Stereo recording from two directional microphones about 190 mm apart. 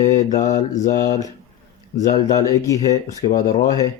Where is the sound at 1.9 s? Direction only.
40° left (ahead or behind).